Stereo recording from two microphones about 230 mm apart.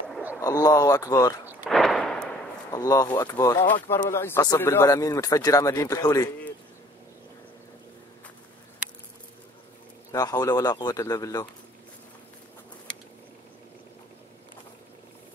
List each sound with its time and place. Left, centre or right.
0.1 s bird: centre
0.4 s speech: centre
1.5 s gunshot: centre
2.7 s speech: centre
10.1 s speech: centre